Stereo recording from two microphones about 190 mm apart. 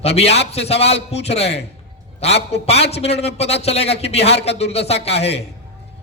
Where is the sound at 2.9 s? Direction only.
35° left (ahead or behind).